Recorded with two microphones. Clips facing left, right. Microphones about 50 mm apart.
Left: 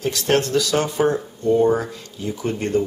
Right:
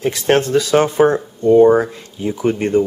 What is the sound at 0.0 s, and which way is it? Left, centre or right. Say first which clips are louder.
Speech: right 4 dB; right.